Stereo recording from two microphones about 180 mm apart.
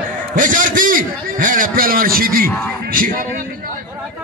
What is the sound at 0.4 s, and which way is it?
A man's voice, 45° right (ahead or behind).